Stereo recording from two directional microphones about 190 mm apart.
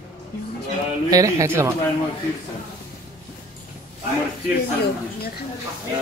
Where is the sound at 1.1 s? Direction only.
15° right (ahead or behind).